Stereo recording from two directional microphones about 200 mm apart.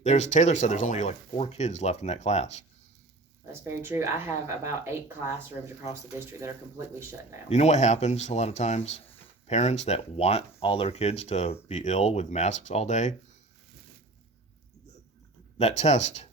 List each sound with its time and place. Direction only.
0.0 s speech: 35° left (ahead or behind)
3.5 s speech: 10° right (ahead or behind)
7.5 s speech: 35° left (ahead or behind)
15.5 s speech: 35° left (ahead or behind)